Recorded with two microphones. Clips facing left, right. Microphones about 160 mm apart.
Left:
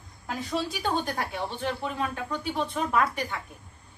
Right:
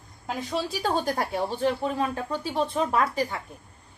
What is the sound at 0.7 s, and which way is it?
Speech, 35° right (ahead or behind).